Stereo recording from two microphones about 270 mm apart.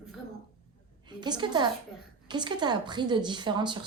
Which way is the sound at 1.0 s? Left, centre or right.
Centre.